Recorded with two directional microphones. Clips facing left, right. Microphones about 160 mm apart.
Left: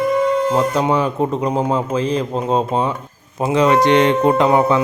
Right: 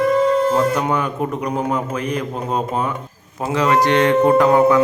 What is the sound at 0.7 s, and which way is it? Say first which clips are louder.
Speech: left 3 dB; 30° left (ahead or behind).